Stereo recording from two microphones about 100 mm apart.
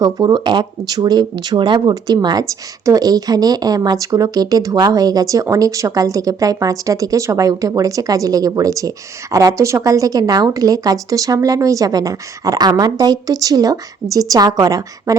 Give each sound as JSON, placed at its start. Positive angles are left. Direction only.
{"t": 0.0, "sound": "speech", "side_deg": -45}